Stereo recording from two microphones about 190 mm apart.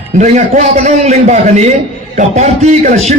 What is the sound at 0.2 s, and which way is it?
A man's voice, 40° right (ahead or behind).